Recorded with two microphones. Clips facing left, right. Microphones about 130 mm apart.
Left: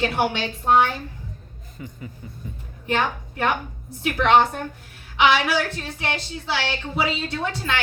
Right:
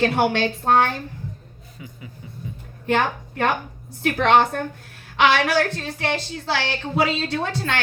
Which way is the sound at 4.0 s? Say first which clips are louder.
Even; 60° right (ahead or behind).